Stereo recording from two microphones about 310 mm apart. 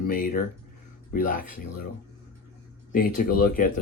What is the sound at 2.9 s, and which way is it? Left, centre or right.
Speech, left.